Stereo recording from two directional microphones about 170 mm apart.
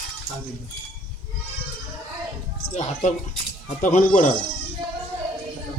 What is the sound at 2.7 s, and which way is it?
Speech, 45° left (ahead or behind).